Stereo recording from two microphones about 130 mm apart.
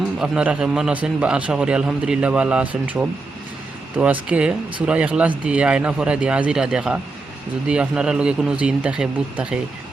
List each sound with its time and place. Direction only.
0.2 s a man's voice: 5° right (ahead or behind)